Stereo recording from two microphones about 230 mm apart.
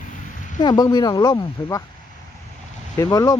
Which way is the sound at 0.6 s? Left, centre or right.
Centre.